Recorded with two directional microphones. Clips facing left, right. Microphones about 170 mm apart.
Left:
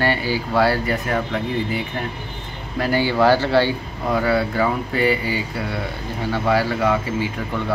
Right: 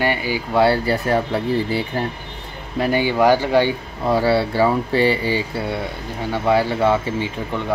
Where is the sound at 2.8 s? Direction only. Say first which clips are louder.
Right 1 dB; 20° right (ahead or behind).